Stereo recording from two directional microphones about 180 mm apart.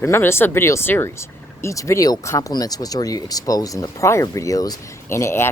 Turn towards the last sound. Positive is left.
turn(degrees=15)  # may be behind; listen again after turning